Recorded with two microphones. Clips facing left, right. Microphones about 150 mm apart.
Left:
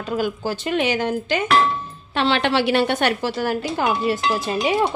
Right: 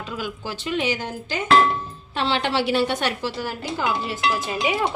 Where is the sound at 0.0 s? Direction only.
45° left (ahead or behind).